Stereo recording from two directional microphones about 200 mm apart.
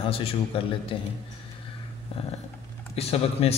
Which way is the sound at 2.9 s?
30° left (ahead or behind).